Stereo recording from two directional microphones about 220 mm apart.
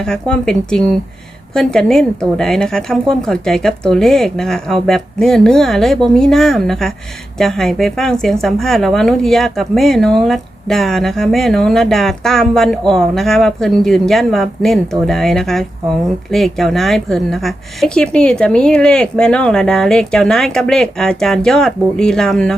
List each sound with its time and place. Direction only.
0.0 s speech: 5° left (ahead or behind)